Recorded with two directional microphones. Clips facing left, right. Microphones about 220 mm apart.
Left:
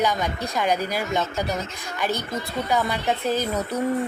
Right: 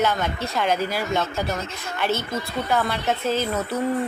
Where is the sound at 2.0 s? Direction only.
15° left (ahead or behind).